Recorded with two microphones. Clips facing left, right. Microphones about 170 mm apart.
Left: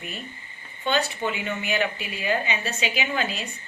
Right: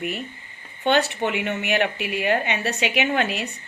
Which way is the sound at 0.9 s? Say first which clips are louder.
Right 4 dB; 75° right (ahead or behind).